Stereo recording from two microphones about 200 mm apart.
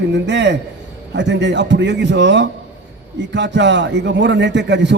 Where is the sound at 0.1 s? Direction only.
60° right (ahead or behind).